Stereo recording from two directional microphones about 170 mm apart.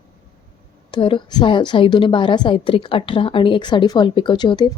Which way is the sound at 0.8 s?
30° left (ahead or behind).